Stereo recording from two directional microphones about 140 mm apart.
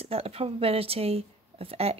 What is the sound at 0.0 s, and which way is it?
Speech, 45° right (ahead or behind).